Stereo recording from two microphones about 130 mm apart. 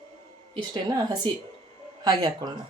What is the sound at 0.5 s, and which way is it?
Speech, 35° right (ahead or behind).